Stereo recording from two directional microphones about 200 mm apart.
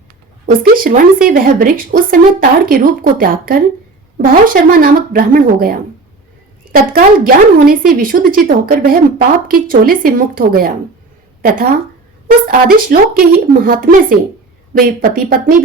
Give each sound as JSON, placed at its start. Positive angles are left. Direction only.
{"t": 0.5, "sound": "speech", "side_deg": -45}
{"t": 12.5, "sound": "speech", "side_deg": -45}